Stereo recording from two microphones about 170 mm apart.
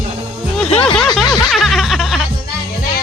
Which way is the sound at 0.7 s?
35° left (ahead or behind).